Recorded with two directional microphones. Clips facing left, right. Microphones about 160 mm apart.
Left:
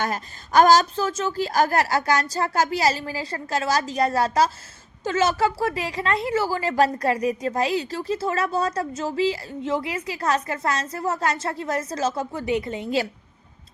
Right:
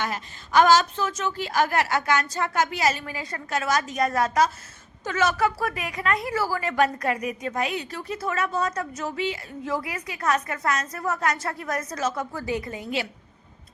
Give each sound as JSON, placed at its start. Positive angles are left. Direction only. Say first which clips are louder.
{"t": 0.0, "sound": "a woman's voice", "louder": "left 3 dB", "side_deg": 40}